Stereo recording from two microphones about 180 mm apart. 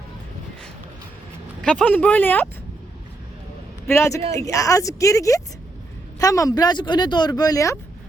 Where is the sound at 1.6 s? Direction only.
5° left (ahead or behind).